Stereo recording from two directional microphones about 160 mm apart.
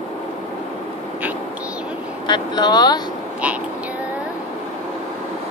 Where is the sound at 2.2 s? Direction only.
25° left (ahead or behind).